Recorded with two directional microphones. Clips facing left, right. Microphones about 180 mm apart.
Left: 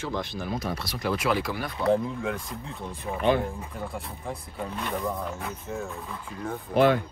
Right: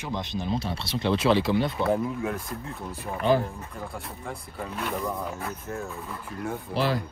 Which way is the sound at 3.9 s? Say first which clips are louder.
Left 1 dB; centre (ahead or behind).